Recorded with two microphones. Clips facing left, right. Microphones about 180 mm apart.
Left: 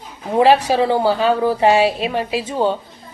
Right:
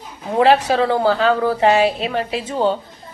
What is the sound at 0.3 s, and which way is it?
A woman's voice, 15° left (ahead or behind).